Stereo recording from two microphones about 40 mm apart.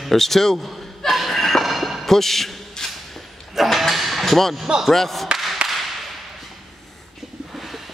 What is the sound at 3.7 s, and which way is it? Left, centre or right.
Hammer, centre.